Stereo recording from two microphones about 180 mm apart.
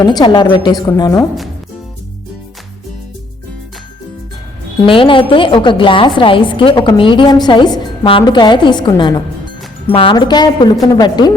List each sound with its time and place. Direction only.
0.0 s a woman's voice: 25° left (ahead or behind)
4.9 s a woman's voice: 30° left (ahead or behind)